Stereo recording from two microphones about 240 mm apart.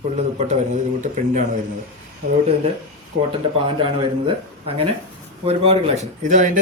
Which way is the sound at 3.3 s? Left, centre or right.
Right.